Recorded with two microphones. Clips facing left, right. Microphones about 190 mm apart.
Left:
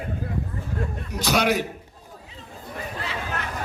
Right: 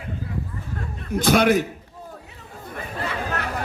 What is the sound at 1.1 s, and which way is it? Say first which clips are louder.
Speech: right 5 dB; 50° right (ahead or behind).